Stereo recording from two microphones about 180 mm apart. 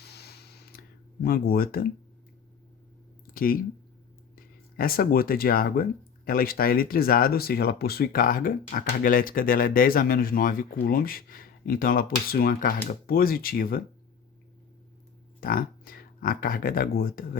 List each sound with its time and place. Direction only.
0.1 s a sound: 65° left (ahead or behind)
1.2 s speech: 55° left (ahead or behind)
3.3 s speech: 55° left (ahead or behind)
15.4 s speech: 55° left (ahead or behind)